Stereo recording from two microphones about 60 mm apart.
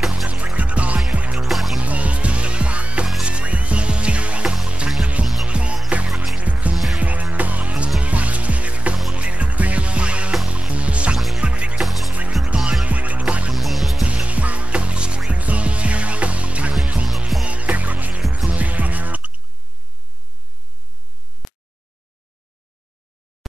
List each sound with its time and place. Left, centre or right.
0.6 s music: right
1.4 s music: centre
1.8 s music: right
5.2 s music: centre
5.5 s music: centre
6.0 s music: centre
6.3 s music: right
11.1 s music: centre
11.4 s music: centre
11.8 s music: centre
12.1 s music: right
13.5 s music: centre
14.0 s music: right
21.4 s a sound: centre